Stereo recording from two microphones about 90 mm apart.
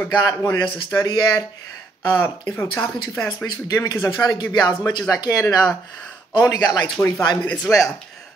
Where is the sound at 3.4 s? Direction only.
40° left (ahead or behind).